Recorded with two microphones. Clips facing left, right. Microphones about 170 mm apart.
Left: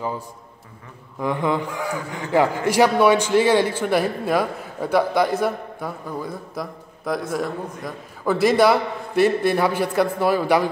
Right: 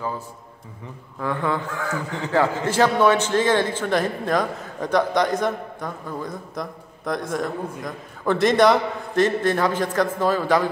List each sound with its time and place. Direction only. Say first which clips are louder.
1.2 s a man's voice: left 2 dB; 15° left (ahead or behind)